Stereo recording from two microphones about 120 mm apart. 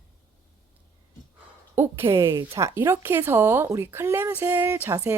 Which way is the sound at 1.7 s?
20° right (ahead or behind).